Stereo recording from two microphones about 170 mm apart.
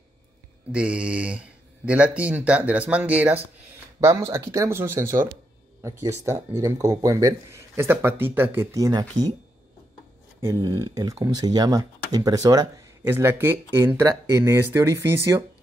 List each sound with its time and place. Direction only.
0.7 s speech: 5° right (ahead or behind)
10.4 s speech: 20° right (ahead or behind)